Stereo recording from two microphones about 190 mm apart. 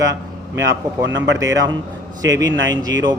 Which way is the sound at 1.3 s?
20° right (ahead or behind).